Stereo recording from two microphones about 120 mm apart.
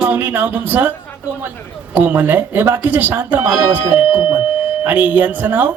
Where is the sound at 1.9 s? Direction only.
15° right (ahead or behind).